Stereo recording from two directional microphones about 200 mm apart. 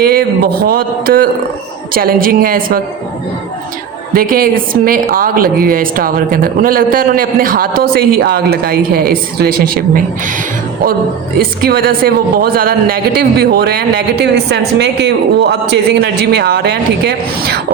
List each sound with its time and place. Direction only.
0.0 s a woman's voice: 50° right (ahead or behind)
4.1 s a woman's voice: 45° right (ahead or behind)
11.3 s a woman's voice: 50° right (ahead or behind)